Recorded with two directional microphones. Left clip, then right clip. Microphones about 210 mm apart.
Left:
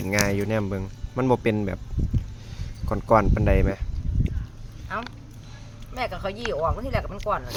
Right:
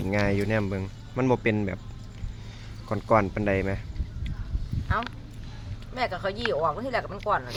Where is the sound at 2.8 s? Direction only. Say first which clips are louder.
Left 3 dB; 10° left (ahead or behind).